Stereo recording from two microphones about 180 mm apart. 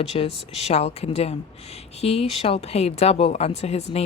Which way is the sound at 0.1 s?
35° left (ahead or behind).